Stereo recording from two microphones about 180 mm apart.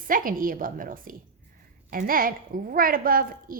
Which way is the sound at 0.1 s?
50° right (ahead or behind).